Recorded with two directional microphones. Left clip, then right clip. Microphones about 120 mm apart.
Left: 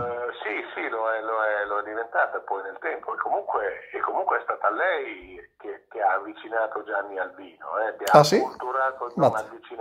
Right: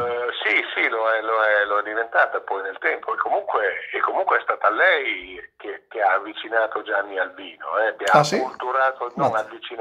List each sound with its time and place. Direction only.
0.0 s speech: 35° right (ahead or behind)
8.0 s speech: 30° left (ahead or behind)
8.6 s speech: 30° right (ahead or behind)